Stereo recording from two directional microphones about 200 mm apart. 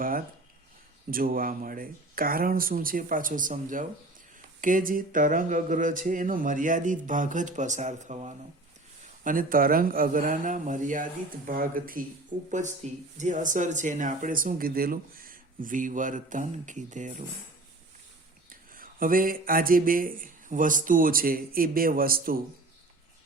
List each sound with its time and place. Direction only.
1.1 s speech: 45° right (ahead or behind)
18.7 s speech: 45° right (ahead or behind)